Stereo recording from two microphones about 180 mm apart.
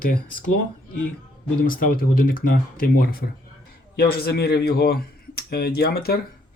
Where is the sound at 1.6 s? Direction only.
55° left (ahead or behind).